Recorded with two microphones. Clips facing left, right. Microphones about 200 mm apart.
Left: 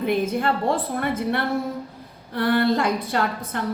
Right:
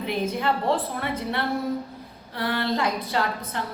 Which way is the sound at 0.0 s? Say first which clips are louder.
Left 4 dB; 50° left (ahead or behind).